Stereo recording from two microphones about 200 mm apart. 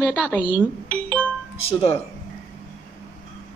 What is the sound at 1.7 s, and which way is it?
Speech, 30° left (ahead or behind).